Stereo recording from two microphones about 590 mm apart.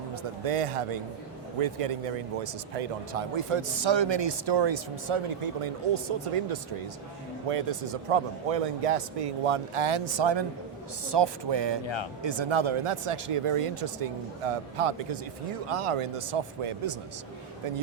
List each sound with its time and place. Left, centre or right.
0.2 s speech: right